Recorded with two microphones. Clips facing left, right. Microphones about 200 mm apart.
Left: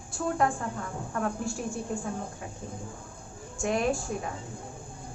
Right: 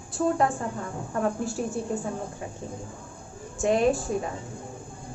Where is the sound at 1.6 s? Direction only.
40° right (ahead or behind).